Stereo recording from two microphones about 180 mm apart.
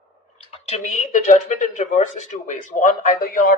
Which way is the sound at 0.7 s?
40° left (ahead or behind).